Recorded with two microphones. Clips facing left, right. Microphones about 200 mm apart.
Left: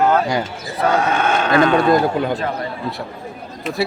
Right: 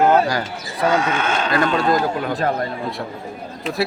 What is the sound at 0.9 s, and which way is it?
Speech, 55° left (ahead or behind).